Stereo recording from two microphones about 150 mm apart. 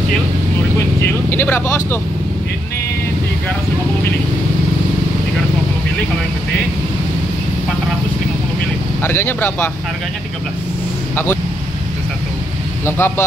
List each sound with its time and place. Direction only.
1.0 s speech: 15° left (ahead or behind)
9.0 s speech: 15° left (ahead or behind)
12.8 s speech: 15° left (ahead or behind)